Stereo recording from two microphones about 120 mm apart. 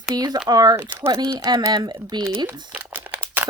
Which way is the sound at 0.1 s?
35° right (ahead or behind).